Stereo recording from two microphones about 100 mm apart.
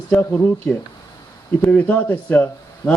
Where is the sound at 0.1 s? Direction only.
20° left (ahead or behind).